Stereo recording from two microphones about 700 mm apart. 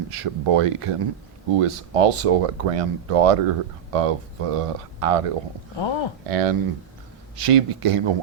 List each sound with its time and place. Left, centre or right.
0.2 s speech: right
5.7 s speech: left
6.2 s speech: right